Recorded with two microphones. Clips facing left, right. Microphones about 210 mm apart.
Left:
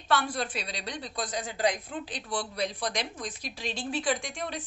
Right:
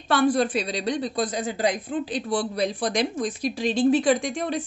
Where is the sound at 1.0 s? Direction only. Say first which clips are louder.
Right 9 dB; 30° right (ahead or behind).